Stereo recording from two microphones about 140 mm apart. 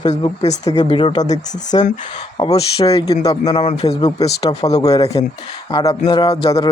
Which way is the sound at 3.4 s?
50° left (ahead or behind).